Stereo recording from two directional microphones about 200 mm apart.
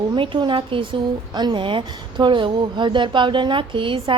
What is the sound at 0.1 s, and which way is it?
A woman's voice, 25° right (ahead or behind).